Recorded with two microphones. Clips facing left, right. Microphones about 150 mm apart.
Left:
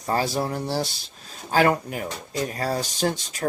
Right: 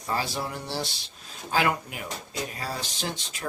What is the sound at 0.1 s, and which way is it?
Speech, 40° left (ahead or behind).